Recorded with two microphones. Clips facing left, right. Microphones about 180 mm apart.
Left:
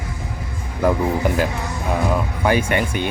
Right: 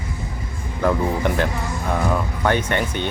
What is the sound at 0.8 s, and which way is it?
Speech, 5° left (ahead or behind).